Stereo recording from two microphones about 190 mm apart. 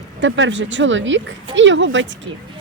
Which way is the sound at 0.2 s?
75° right (ahead or behind).